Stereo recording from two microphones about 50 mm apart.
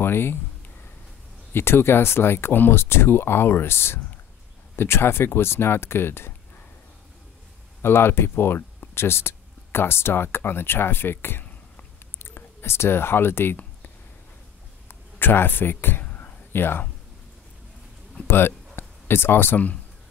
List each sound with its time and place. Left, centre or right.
0.0 s speech: left
1.5 s speech: left
7.8 s speech: left
14.9 s a sound: left
18.2 s speech: left